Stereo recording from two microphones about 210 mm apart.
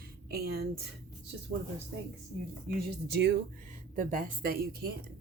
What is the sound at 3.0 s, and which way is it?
Speech, 50° right (ahead or behind).